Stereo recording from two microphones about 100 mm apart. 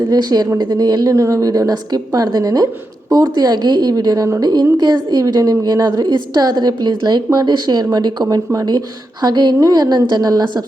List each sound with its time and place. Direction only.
0.1 s a woman's voice: 40° right (ahead or behind)